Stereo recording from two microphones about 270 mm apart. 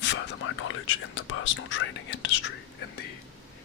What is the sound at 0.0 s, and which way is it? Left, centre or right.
Speech, left.